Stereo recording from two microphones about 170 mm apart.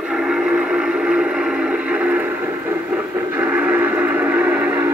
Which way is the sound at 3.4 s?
10° right (ahead or behind).